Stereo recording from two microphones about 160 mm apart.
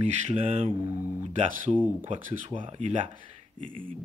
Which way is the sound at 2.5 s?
30° right (ahead or behind).